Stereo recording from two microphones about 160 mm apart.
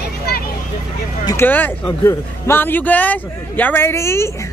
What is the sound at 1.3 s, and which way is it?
Speech, 15° left (ahead or behind).